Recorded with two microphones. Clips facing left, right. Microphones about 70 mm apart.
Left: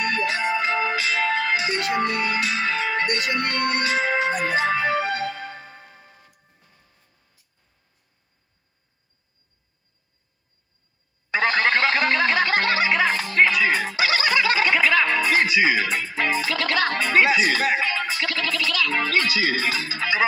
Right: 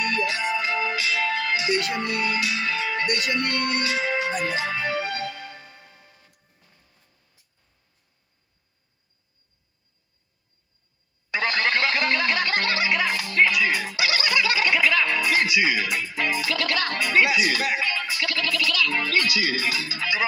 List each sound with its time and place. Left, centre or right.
0.0 s music: left
11.3 s snicker: left